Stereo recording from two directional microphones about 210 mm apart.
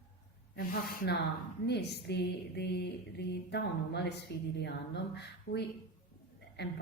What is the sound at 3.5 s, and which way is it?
Speech, 55° left (ahead or behind).